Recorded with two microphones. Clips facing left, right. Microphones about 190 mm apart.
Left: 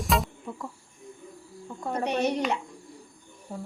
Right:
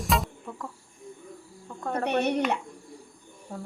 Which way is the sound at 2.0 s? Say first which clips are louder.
Right 1 dB; 60° right (ahead or behind).